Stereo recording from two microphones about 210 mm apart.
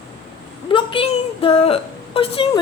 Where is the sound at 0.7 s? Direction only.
25° left (ahead or behind).